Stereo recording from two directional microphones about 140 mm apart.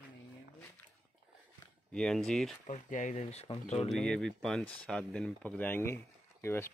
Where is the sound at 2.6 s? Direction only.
65° left (ahead or behind).